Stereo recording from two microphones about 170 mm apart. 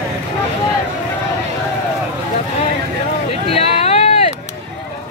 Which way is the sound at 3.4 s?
35° left (ahead or behind).